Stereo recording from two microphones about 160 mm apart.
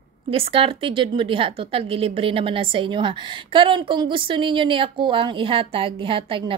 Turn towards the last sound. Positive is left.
turn(degrees=-35)  # may be behind; listen again after turning